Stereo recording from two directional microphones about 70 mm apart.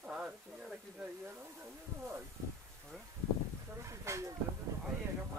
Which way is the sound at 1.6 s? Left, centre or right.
Right.